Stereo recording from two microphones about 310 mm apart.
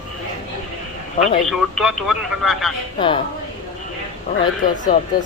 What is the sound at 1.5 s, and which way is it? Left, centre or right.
Speech, centre.